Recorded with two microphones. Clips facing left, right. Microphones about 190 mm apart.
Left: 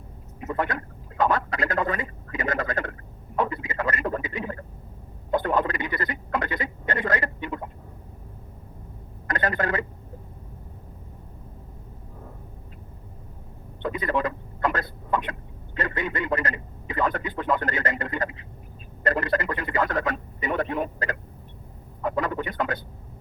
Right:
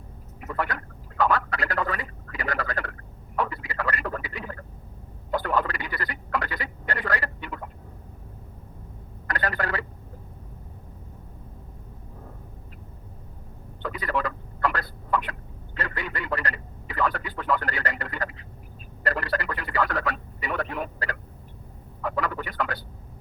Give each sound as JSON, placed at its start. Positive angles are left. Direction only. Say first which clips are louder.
{"t": 0.4, "sound": "speech", "louder": "left 3 dB", "side_deg": 20}
{"t": 9.2, "sound": "speech", "louder": "left 3 dB", "side_deg": 20}
{"t": 13.8, "sound": "speech", "louder": "left 3 dB", "side_deg": 20}